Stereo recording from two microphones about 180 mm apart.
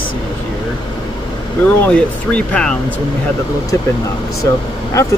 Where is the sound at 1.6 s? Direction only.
5° left (ahead or behind).